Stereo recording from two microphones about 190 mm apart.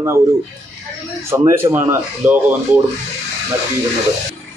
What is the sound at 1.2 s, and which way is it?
Speech, 15° right (ahead or behind).